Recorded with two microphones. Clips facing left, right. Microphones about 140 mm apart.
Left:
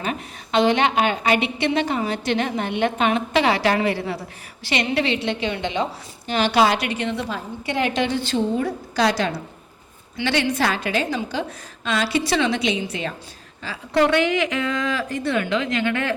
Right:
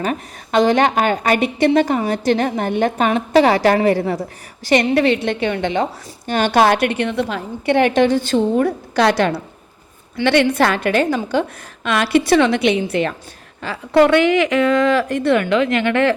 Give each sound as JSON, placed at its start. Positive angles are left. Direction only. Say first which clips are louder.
{"t": 0.0, "sound": "a woman's voice", "louder": "right 5 dB", "side_deg": -45}
{"t": 8.0, "sound": "a woman's voice", "louder": "right 6 dB", "side_deg": -45}